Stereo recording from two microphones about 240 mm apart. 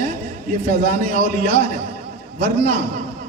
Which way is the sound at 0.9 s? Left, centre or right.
Right.